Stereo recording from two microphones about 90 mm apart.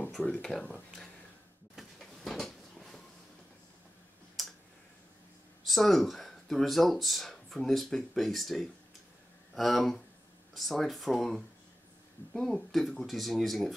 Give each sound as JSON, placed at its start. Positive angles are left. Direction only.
{"t": 0.2, "sound": "speech", "side_deg": 10}
{"t": 1.8, "sound": "a sound", "side_deg": 0}
{"t": 5.7, "sound": "speech", "side_deg": 0}